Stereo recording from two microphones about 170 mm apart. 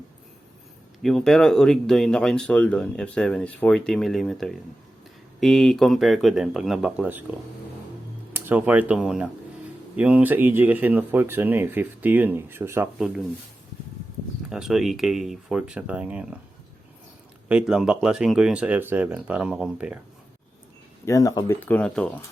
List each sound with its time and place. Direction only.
1.0 s speech: centre (ahead or behind)
8.3 s speech: 10° right (ahead or behind)
14.5 s speech: centre (ahead or behind)
17.5 s speech: 5° right (ahead or behind)
21.0 s speech: 20° left (ahead or behind)